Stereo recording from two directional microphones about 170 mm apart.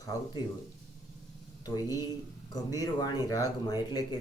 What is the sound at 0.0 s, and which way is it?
Speech, 20° left (ahead or behind).